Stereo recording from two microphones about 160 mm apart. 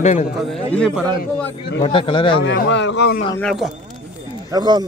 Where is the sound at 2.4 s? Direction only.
90° left.